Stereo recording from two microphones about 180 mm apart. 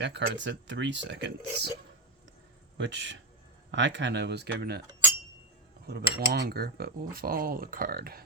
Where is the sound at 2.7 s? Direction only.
90° right; by 4.8 s 65° right (ahead or behind).